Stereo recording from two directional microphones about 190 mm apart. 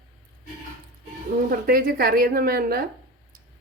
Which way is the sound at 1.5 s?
50° right (ahead or behind).